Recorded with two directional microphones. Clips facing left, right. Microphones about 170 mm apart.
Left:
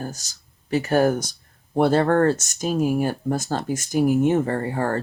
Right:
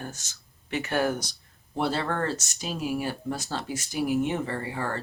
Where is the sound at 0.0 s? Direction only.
35° left (ahead or behind).